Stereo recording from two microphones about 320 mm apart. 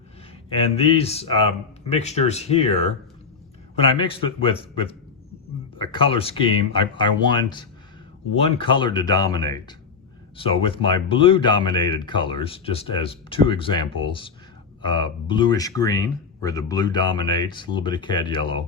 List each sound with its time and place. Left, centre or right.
0.5 s speech: centre